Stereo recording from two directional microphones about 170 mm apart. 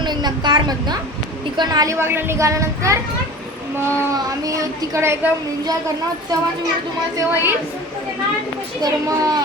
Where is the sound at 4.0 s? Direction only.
20° right (ahead or behind).